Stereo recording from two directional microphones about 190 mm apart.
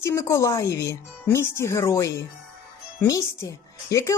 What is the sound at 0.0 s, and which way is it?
A woman's voice, 15° left (ahead or behind).